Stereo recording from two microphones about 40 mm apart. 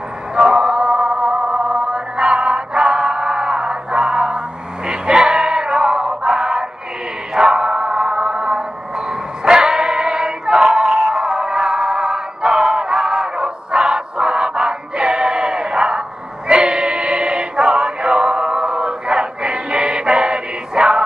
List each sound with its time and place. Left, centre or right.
0.4 s music: right
16.4 s choir: right